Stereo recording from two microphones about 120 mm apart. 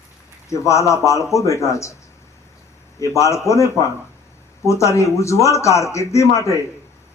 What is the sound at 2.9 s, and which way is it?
Speech, 25° left (ahead or behind).